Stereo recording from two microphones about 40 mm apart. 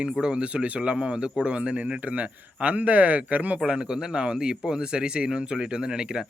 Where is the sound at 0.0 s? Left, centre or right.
Right.